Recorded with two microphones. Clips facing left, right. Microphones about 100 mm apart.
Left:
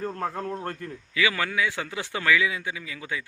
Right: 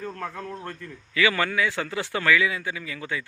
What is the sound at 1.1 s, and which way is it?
A man's voice, 10° left (ahead or behind).